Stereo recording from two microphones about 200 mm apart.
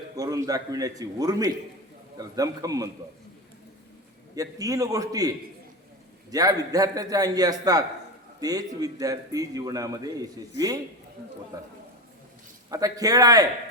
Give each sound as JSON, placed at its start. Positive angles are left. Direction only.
{"t": 0.2, "sound": "a man's voice", "side_deg": -20}
{"t": 4.4, "sound": "a man's voice", "side_deg": -15}
{"t": 6.3, "sound": "a man's voice", "side_deg": -20}
{"t": 12.7, "sound": "a man's voice", "side_deg": -20}